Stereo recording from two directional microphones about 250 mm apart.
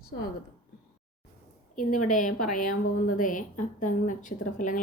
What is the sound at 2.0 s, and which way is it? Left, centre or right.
A woman's voice, left.